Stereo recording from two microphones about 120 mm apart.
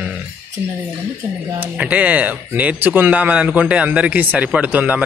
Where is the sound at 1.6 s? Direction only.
10° right (ahead or behind).